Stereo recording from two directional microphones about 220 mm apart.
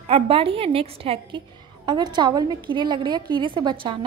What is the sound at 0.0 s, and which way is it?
Speech, 25° right (ahead or behind).